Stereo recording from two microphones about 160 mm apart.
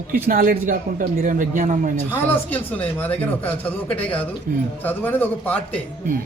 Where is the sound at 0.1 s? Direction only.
60° right (ahead or behind).